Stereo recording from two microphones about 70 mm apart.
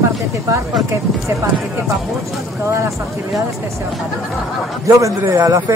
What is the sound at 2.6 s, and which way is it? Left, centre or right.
Speech, right.